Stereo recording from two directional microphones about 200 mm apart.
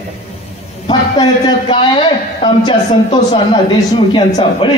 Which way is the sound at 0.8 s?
25° left (ahead or behind).